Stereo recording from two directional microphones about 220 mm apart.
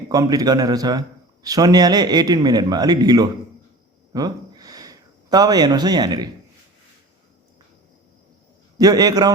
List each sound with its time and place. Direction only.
0.1 s a man's voice: 15° right (ahead or behind)
4.1 s a sound: 15° right (ahead or behind)
8.8 s a man's voice: 15° right (ahead or behind)